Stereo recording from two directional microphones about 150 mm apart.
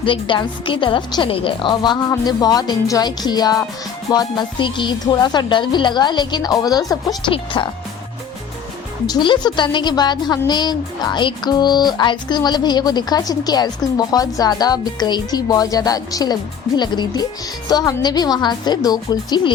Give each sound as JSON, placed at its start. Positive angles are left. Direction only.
{"t": 0.0, "sound": "a woman's voice", "side_deg": 35}
{"t": 9.0, "sound": "a woman's voice", "side_deg": 30}